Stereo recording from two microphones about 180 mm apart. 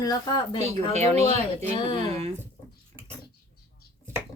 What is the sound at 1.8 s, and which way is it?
Speech, 30° left (ahead or behind).